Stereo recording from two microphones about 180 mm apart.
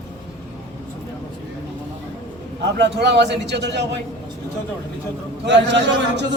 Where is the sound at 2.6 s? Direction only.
70° right (ahead or behind).